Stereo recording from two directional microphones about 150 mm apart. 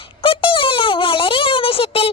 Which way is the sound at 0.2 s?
35° left (ahead or behind).